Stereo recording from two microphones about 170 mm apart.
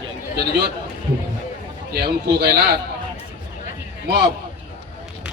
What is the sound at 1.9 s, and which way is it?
Speech, 65° right (ahead or behind).